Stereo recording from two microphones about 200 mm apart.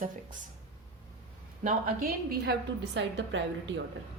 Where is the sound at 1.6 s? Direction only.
40° right (ahead or behind).